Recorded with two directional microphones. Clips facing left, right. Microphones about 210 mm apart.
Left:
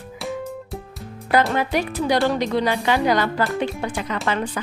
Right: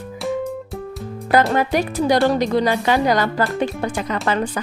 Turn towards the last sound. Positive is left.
turn(degrees=-45)  # may be behind; listen again after turning